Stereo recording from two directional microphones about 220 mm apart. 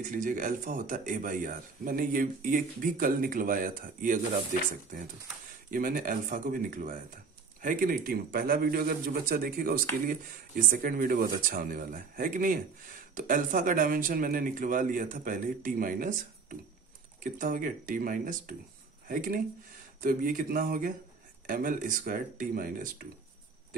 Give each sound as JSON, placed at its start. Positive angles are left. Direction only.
{"t": 0.0, "sound": "speech", "side_deg": -35}
{"t": 5.7, "sound": "speech", "side_deg": -40}